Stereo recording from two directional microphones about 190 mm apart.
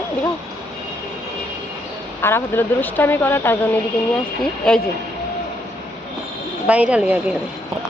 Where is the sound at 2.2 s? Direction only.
10° left (ahead or behind).